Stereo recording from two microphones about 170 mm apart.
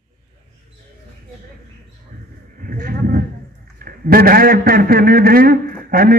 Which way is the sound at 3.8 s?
60° right (ahead or behind).